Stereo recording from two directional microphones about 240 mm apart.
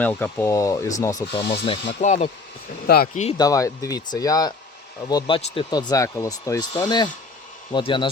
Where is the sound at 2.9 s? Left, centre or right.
Left.